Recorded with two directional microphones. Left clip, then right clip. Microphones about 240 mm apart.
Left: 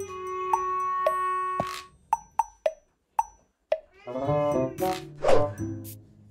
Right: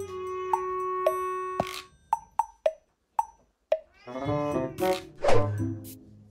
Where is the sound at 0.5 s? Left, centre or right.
Centre.